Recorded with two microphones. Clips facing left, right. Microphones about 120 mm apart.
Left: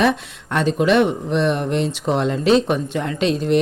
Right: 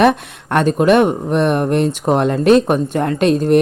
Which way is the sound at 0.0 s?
55° right (ahead or behind).